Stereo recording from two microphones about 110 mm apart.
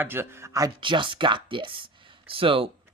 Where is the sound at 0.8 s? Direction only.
50° right (ahead or behind).